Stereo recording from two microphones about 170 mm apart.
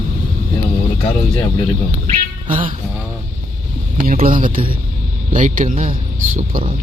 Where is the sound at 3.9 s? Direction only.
55° right (ahead or behind).